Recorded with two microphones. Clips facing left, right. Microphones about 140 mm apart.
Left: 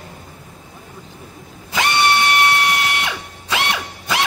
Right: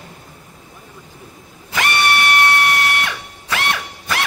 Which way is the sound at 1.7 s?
20° left (ahead or behind).